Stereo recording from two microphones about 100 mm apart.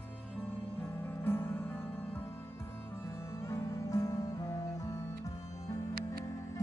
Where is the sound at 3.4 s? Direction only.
30° left (ahead or behind).